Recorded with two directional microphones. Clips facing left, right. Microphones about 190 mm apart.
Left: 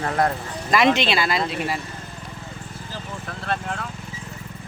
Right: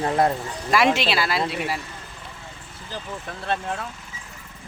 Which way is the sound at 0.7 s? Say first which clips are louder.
Left 1 dB; 5° right (ahead or behind).